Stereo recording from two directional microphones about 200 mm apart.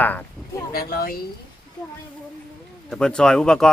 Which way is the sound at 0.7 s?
50° left (ahead or behind).